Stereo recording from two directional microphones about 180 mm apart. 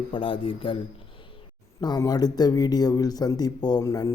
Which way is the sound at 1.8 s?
20° left (ahead or behind).